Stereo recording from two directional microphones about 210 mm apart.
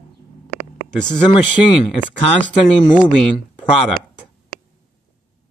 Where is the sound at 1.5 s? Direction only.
Centre (ahead or behind).